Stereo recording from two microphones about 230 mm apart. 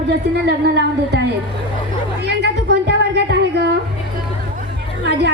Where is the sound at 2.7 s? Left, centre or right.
Right.